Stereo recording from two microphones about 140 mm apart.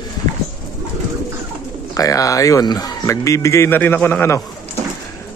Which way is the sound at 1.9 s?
25° left (ahead or behind).